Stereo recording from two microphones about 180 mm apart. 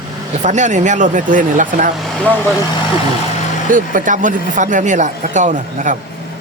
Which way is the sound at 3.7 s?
45° right (ahead or behind).